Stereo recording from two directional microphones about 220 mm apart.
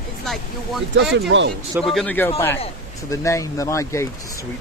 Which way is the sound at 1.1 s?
55° right (ahead or behind).